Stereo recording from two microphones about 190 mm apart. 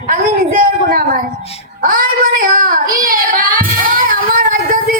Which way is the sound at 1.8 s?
50° right (ahead or behind).